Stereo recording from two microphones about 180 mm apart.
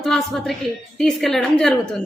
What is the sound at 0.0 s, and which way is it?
A woman's voice, centre (ahead or behind).